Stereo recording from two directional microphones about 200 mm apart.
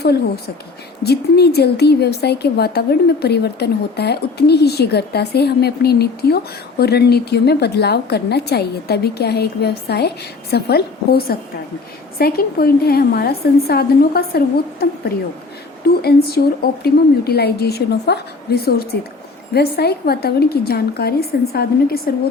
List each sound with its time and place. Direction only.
0.0 s a woman's voice: 55° left (ahead or behind)
16.0 s a woman's voice: 50° left (ahead or behind)